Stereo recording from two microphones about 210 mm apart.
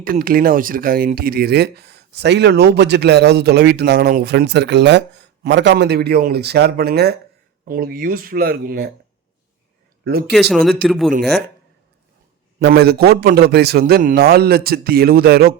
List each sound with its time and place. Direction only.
0.0 s speech: 45° right (ahead or behind)
10.0 s speech: 50° right (ahead or behind)
10.3 s speech: centre (ahead or behind)
12.5 s speech: 50° right (ahead or behind)